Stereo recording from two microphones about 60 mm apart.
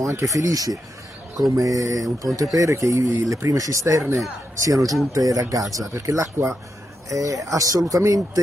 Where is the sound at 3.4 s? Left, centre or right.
Right.